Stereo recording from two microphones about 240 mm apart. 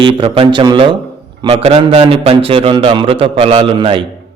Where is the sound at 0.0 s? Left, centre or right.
Right.